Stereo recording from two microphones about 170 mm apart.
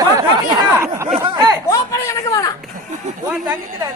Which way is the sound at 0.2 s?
15° right (ahead or behind).